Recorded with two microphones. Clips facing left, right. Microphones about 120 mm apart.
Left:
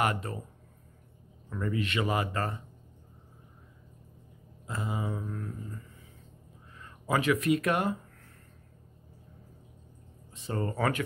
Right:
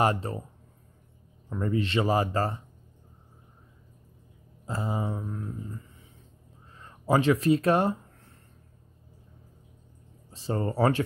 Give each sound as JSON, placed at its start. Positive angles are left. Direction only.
{"t": 0.0, "sound": "mantra", "side_deg": -30}
{"t": 1.5, "sound": "speech", "side_deg": -30}
{"t": 4.6, "sound": "mantra", "side_deg": -30}
{"t": 6.8, "sound": "speech", "side_deg": -30}
{"t": 10.3, "sound": "speech", "side_deg": -30}